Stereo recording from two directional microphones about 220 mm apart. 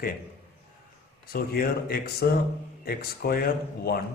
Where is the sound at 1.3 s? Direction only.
45° left (ahead or behind).